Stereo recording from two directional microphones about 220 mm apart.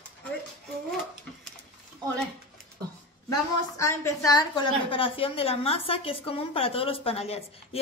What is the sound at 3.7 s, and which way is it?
A woman's voice, 15° left (ahead or behind).